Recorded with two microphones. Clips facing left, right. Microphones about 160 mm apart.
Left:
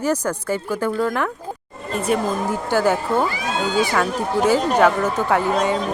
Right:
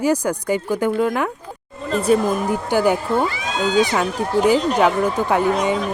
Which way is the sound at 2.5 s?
15° right (ahead or behind).